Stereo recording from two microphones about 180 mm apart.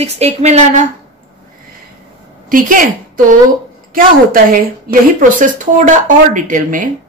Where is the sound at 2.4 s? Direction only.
50° right (ahead or behind).